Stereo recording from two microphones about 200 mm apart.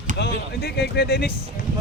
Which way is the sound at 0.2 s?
55° left (ahead or behind).